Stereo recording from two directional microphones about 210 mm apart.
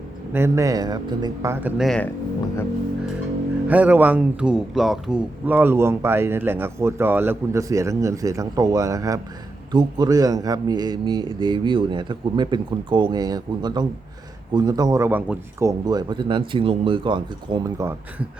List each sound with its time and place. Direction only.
0.3 s speech: 15° right (ahead or behind)
1.8 s speech: centre (ahead or behind)
3.7 s speech: 5° right (ahead or behind)